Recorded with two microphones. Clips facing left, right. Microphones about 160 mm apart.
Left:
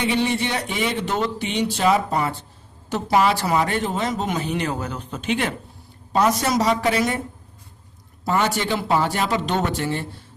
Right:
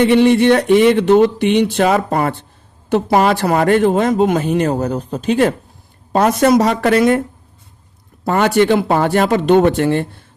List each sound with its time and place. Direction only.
0.0 s speech: 60° right (ahead or behind); by 5.5 s 40° right (ahead or behind)
6.1 s speech: 55° right (ahead or behind)
8.2 s speech: 60° right (ahead or behind)